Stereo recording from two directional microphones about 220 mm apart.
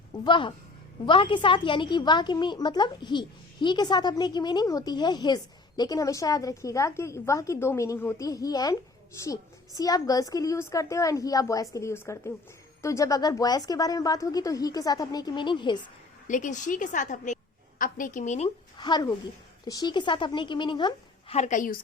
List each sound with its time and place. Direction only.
0.3 s a woman's voice: 20° left (ahead or behind)
16.2 s a woman's voice: 35° left (ahead or behind)